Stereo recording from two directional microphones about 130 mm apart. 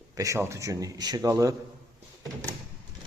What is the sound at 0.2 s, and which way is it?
A man's voice, 25° right (ahead or behind).